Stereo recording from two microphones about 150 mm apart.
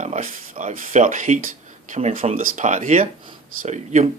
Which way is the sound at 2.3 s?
65° right (ahead or behind).